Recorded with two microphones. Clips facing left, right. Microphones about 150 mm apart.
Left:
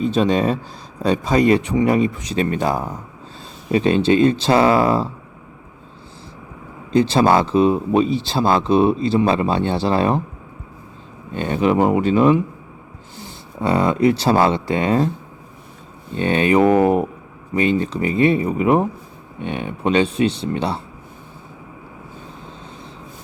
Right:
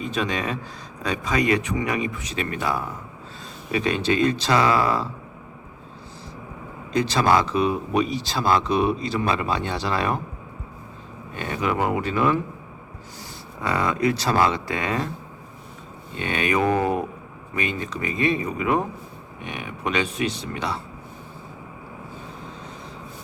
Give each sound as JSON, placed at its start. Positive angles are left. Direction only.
{"t": 0.0, "sound": "speech", "side_deg": 30}
{"t": 6.9, "sound": "speech", "side_deg": 25}
{"t": 11.3, "sound": "speech", "side_deg": 25}
{"t": 16.1, "sound": "speech", "side_deg": 30}